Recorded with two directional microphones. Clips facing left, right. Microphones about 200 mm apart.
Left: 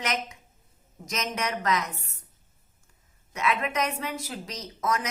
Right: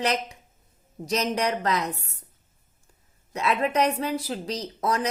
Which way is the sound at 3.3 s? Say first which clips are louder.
Right 4 dB; 35° right (ahead or behind).